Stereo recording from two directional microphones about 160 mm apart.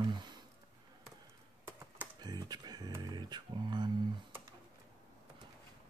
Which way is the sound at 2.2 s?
25° right (ahead or behind).